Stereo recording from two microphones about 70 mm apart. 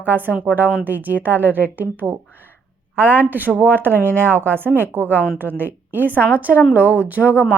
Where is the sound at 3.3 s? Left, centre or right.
Right.